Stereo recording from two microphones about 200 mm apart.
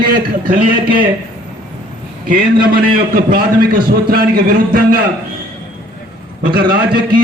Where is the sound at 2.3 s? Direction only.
45° right (ahead or behind).